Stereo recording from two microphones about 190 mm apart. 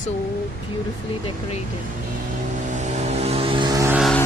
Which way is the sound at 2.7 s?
40° right (ahead or behind).